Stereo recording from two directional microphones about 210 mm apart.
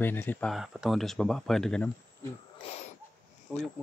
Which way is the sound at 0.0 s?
10° left (ahead or behind).